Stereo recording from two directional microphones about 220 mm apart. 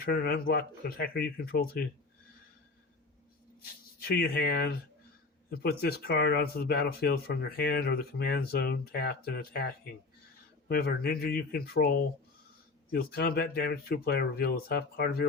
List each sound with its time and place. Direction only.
0.0 s speech: 45° left (ahead or behind)
3.6 s speech: 45° left (ahead or behind)
10.7 s speech: 45° left (ahead or behind)